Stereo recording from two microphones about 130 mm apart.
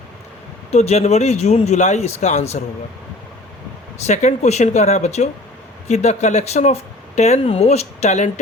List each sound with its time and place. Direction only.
0.7 s speech: 60° left (ahead or behind)
3.9 s speech: 60° left (ahead or behind)